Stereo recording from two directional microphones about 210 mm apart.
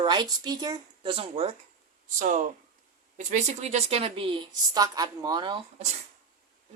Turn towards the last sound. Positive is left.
turn(degrees=-20)  # may be behind; listen again after turning